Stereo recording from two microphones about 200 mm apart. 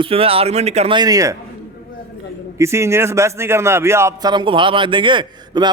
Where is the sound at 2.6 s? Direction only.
15° right (ahead or behind).